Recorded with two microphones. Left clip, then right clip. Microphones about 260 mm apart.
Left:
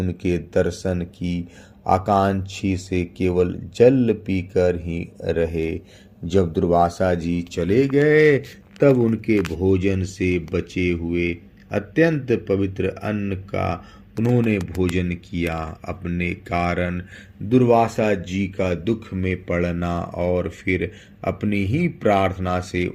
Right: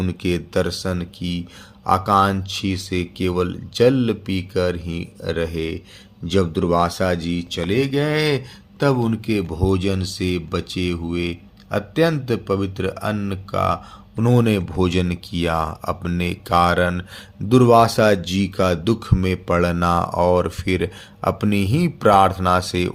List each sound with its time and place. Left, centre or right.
0.0 s speech: centre